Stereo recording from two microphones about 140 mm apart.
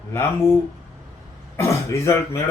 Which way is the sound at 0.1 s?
15° left (ahead or behind).